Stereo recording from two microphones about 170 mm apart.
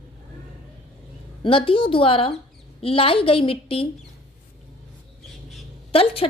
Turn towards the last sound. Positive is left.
turn(degrees=35)  # may be behind; listen again after turning